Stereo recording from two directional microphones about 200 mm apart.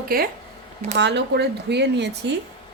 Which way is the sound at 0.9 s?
60° right (ahead or behind).